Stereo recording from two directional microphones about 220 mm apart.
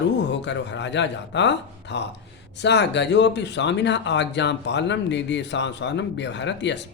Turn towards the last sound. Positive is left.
turn(degrees=55)  # may be behind; listen again after turning